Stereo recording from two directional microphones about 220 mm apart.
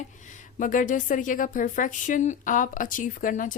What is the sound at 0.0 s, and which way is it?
A woman's voice, 35° left (ahead or behind).